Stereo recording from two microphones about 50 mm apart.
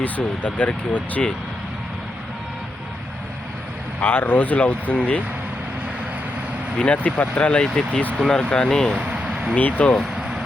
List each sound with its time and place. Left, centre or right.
0.0 s speech: left
4.0 s speech: left
6.9 s speech: left
7.5 s speech: centre
9.0 s vehicle: right
9.6 s speech: left